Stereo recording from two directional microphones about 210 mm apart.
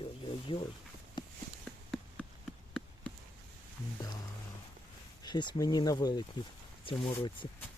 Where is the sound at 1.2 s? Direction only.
20° left (ahead or behind).